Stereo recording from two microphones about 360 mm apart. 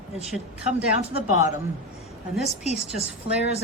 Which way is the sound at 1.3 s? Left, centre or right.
Centre.